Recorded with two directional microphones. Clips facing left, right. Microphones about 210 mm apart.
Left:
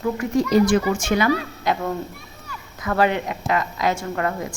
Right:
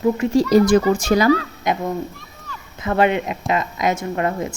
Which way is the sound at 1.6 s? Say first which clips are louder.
Right 1 dB; 20° right (ahead or behind).